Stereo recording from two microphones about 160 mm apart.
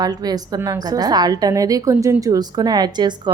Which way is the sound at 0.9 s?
25° right (ahead or behind).